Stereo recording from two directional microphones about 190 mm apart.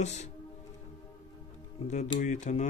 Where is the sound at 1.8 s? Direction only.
40° left (ahead or behind).